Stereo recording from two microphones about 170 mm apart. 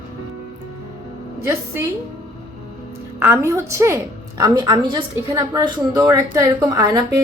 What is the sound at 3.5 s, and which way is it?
A woman's voice, 15° right (ahead or behind).